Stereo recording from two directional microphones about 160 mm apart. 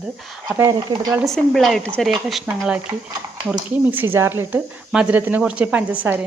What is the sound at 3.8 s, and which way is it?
A woman's voice, 10° right (ahead or behind).